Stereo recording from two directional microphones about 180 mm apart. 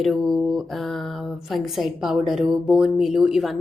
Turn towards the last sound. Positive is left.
turn(degrees=0)  # may be behind; listen again after turning